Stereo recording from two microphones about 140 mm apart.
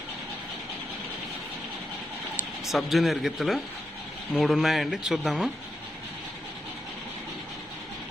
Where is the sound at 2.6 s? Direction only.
Centre (ahead or behind).